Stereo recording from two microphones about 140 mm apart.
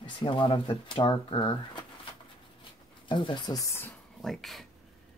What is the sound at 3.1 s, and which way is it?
Speech, 35° left (ahead or behind).